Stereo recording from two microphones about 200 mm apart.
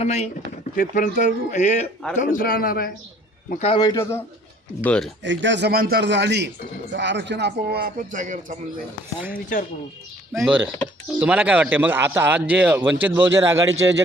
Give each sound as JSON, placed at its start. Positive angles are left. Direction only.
{"t": 0.0, "sound": "a man's voice", "side_deg": 35}
{"t": 3.6, "sound": "a man's voice", "side_deg": 25}
{"t": 5.2, "sound": "a man's voice", "side_deg": -65}
{"t": 9.3, "sound": "a man's voice", "side_deg": 45}
{"t": 10.4, "sound": "speech", "side_deg": -5}